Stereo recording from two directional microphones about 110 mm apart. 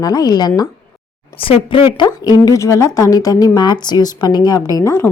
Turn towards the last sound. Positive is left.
turn(degrees=25)  # may be behind; listen again after turning